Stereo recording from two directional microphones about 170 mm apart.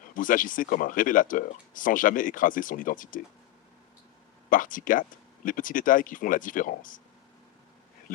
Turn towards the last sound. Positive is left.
turn(degrees=50)  # may be behind; listen again after turning